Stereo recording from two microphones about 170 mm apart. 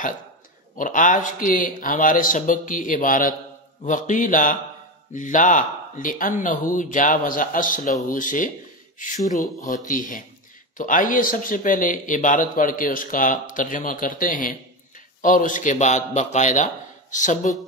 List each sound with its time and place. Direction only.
0.7 s speech: 50° left (ahead or behind)